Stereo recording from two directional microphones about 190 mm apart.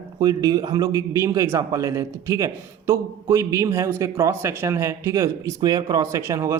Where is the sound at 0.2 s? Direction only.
20° right (ahead or behind).